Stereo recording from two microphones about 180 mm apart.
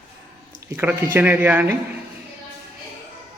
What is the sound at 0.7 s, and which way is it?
A man's voice, 10° right (ahead or behind).